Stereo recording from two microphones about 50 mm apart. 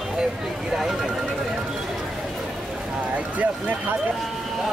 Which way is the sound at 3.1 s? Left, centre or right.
Right.